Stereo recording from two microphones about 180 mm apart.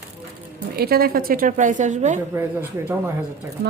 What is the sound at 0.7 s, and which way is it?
Speech, 60° right (ahead or behind).